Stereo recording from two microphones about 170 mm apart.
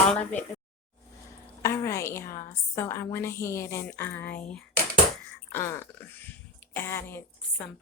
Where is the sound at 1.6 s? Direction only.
15° left (ahead or behind).